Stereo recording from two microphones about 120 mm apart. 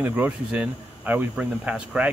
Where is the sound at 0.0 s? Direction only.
15° right (ahead or behind).